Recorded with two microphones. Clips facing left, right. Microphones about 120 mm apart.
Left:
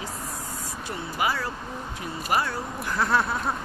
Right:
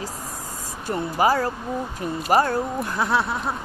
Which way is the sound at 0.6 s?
40° right (ahead or behind).